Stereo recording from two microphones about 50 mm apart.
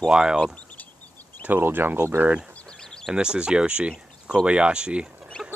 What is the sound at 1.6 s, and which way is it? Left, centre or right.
Speech, right.